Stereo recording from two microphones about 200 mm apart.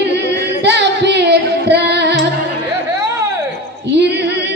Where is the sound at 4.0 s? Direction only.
60° right (ahead or behind).